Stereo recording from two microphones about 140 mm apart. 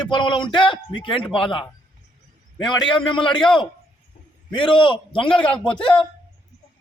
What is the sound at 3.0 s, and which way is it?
Speech, 35° left (ahead or behind).